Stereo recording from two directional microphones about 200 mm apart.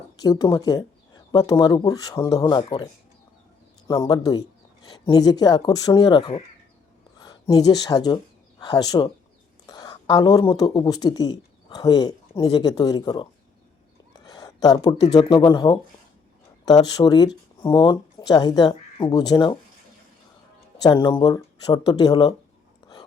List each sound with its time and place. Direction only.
0.2 s speech: 20° left (ahead or behind)
3.8 s speech: 20° left (ahead or behind)
14.3 s speech: 20° left (ahead or behind)
20.8 s speech: 25° left (ahead or behind)